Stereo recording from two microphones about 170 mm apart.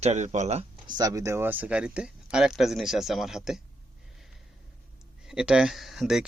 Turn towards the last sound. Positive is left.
turn(degrees=-5)  # may be behind; listen again after turning